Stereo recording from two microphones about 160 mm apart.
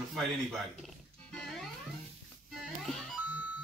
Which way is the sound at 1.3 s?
Centre (ahead or behind).